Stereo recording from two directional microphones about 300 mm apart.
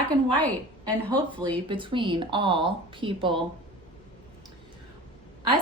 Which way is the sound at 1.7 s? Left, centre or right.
Centre.